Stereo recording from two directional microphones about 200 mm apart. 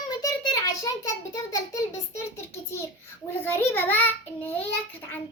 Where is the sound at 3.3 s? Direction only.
10° left (ahead or behind).